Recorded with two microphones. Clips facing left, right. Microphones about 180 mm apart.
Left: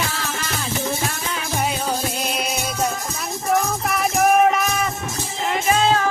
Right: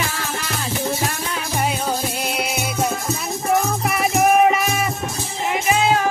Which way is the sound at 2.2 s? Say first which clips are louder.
Right 1 dB; 10° right (ahead or behind).